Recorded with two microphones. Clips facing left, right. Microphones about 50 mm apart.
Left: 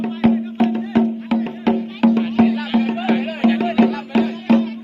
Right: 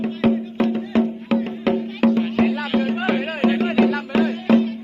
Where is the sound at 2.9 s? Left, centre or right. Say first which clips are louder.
Left 2 dB; right.